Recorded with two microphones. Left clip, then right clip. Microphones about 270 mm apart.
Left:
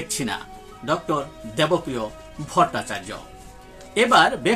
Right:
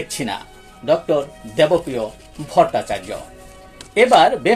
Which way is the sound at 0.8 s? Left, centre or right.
Centre.